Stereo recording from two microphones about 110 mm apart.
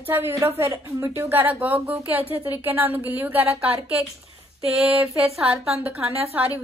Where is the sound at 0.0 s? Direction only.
20° right (ahead or behind).